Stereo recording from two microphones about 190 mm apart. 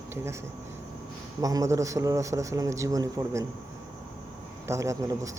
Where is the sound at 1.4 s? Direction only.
20° right (ahead or behind).